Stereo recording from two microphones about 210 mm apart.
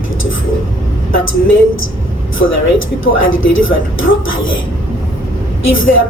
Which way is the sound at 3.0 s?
70° left (ahead or behind).